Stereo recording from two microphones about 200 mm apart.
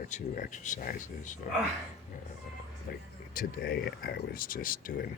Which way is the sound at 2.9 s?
45° left (ahead or behind).